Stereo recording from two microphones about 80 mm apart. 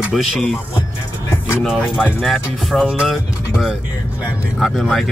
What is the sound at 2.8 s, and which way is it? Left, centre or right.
Speech, centre.